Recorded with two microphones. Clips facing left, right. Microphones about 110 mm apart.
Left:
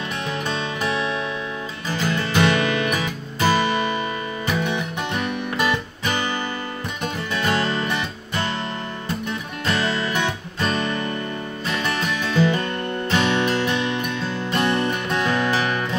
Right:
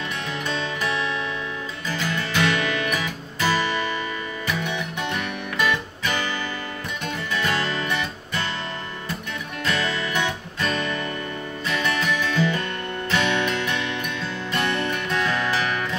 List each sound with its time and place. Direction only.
0.5 s music: 25° left (ahead or behind)
7.3 s music: 30° left (ahead or behind)
9.7 s music: 30° left (ahead or behind)